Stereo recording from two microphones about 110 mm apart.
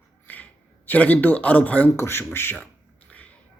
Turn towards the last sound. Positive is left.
turn(degrees=15)  # may be behind; listen again after turning